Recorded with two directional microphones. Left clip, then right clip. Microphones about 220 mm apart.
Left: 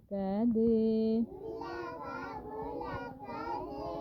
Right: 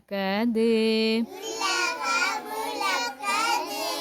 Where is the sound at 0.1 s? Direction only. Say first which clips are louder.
Right 7 dB; 20° right (ahead or behind).